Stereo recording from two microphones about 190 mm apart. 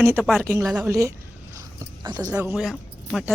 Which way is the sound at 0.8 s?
15° right (ahead or behind).